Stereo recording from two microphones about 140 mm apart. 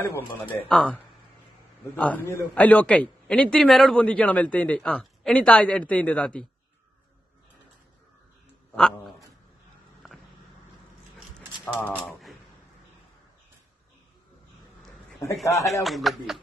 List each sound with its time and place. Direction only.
0.0 s a man's voice: 15° left (ahead or behind)
8.7 s a man's voice: 5° left (ahead or behind)
12.1 s a sound: centre (ahead or behind)
15.2 s speech: 25° left (ahead or behind)
15.6 s speech: centre (ahead or behind)